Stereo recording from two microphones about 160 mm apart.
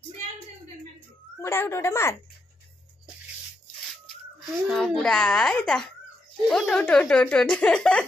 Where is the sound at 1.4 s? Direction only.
15° left (ahead or behind).